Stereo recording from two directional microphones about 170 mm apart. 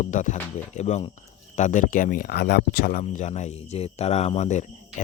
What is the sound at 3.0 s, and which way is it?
Speech, 45° left (ahead or behind).